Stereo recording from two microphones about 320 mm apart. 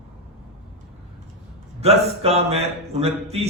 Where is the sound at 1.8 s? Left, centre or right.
Centre.